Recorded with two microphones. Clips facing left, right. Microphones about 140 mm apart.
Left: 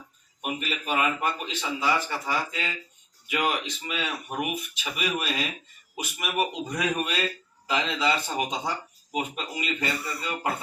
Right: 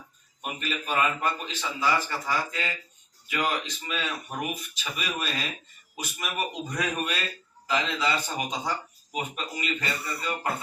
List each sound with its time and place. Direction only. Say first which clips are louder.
0.4 s a man's voice: left 2 dB; 20° left (ahead or behind)